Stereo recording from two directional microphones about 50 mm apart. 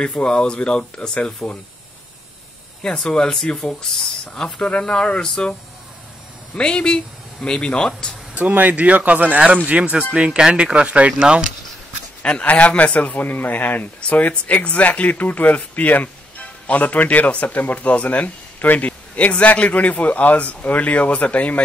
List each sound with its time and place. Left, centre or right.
0.0 s speech: centre
3.1 s speech: centre
6.5 s speech: centre
8.4 s speech: right; by 11.5 s centre
12.2 s speech: left